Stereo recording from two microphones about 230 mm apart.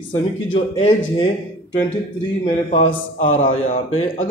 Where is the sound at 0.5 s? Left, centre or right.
Left.